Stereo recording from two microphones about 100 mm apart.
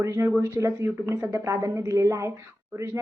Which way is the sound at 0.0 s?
30° right (ahead or behind).